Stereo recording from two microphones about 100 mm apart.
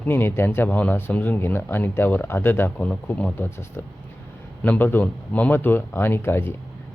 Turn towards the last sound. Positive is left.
turn(degrees=25)  # may be behind; listen again after turning